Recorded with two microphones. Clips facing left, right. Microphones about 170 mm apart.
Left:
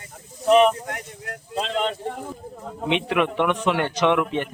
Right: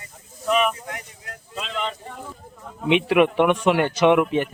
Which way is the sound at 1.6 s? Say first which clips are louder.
Left 5 dB; 40° left (ahead or behind).